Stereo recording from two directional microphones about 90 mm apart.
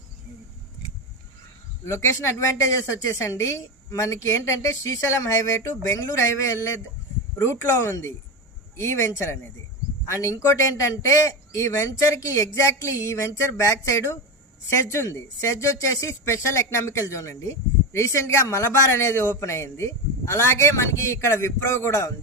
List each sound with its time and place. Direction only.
1.8 s a woman's voice: 30° left (ahead or behind)
7.8 s a woman's voice: 35° left (ahead or behind)